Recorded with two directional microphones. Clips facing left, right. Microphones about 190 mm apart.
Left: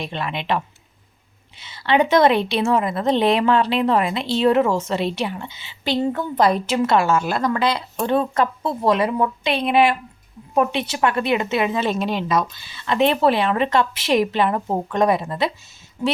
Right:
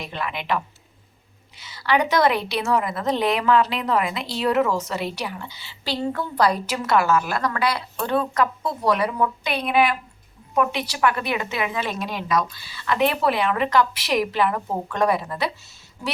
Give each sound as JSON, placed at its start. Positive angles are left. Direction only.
{"t": 0.0, "sound": "a woman's voice", "side_deg": 25}